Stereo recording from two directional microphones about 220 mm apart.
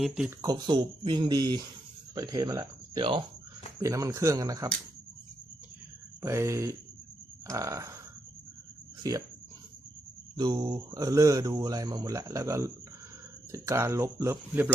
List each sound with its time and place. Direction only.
0.0 s speech: 5° right (ahead or behind)
0.4 s speech: 20° right (ahead or behind)
6.2 s speech: 15° right (ahead or behind)
9.0 s speech: 15° right (ahead or behind)
10.3 s speech: 20° right (ahead or behind)